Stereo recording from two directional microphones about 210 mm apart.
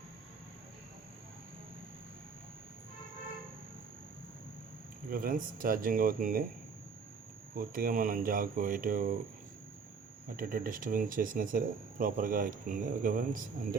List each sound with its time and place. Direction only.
5.1 s speech: 45° right (ahead or behind)
7.5 s speech: 45° right (ahead or behind)
10.3 s speech: 45° right (ahead or behind)